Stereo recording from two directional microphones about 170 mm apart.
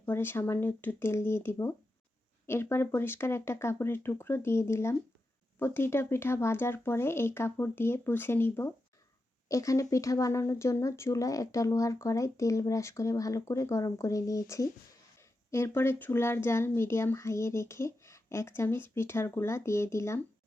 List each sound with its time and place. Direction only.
0.0 s speech: 15° left (ahead or behind)